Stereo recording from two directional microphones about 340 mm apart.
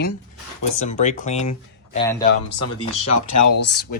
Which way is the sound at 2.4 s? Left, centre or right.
Left.